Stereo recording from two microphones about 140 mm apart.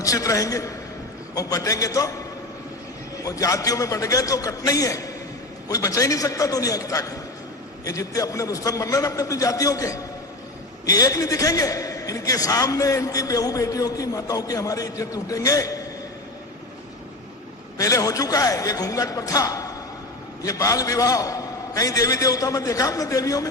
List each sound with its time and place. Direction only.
0.0 s a man's voice: 25° left (ahead or behind)
3.2 s a man's voice: 25° left (ahead or behind)
17.7 s a man's voice: 25° left (ahead or behind)